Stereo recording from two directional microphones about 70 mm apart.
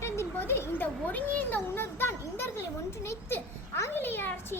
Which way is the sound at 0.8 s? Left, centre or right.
Left.